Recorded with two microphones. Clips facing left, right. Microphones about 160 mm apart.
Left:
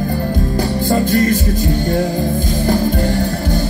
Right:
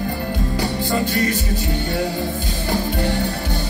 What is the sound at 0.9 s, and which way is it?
Music, 45° left (ahead or behind).